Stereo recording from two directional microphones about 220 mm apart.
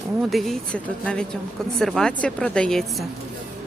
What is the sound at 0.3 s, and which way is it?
A woman's voice, centre (ahead or behind).